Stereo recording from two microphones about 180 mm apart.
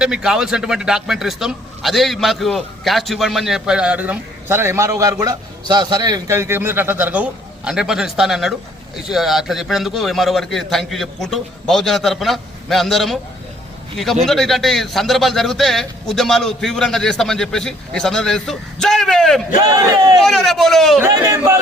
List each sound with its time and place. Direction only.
0.0 s speech: 5° right (ahead or behind)
21.0 s speech: 15° right (ahead or behind)